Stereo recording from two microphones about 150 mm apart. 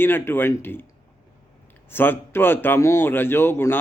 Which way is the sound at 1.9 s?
15° left (ahead or behind).